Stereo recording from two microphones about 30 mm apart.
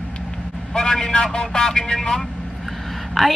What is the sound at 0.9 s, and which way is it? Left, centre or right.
Speech, left.